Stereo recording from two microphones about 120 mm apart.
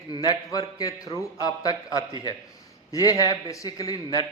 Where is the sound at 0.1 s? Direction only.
35° left (ahead or behind).